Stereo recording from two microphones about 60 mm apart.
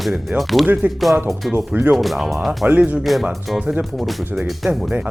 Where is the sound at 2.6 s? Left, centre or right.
Right.